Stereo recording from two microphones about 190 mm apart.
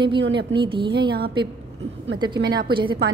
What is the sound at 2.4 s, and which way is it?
Speech, 55° right (ahead or behind).